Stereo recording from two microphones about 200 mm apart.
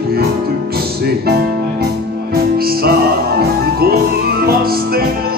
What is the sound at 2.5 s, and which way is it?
Music, 50° right (ahead or behind).